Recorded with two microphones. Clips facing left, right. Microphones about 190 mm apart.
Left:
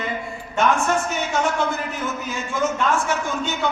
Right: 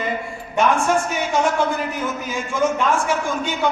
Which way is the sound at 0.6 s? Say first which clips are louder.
Right 2 dB; 10° right (ahead or behind).